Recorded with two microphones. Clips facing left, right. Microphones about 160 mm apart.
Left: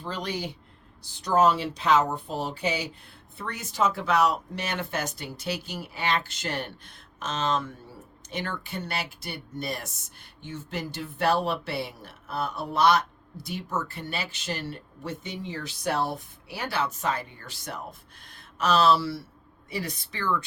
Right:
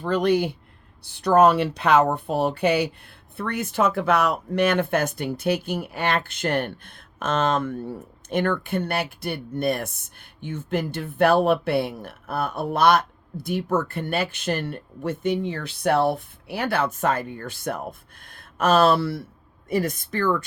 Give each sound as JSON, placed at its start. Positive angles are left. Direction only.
{"t": 0.0, "sound": "a woman's voice", "side_deg": -60}